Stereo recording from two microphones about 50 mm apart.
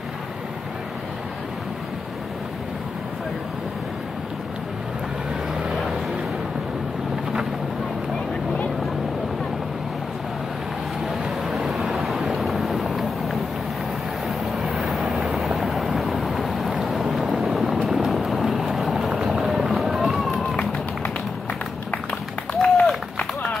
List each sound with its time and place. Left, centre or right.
11.2 s vehicle: centre
14.6 s vehicle: centre
22.5 s a sound: left